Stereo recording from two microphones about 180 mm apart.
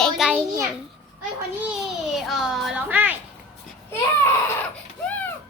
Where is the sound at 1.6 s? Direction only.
Centre (ahead or behind).